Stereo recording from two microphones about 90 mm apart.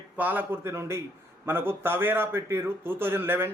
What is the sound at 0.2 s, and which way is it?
A man's voice, 20° right (ahead or behind).